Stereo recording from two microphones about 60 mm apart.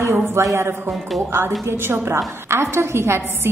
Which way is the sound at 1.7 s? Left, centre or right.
Right.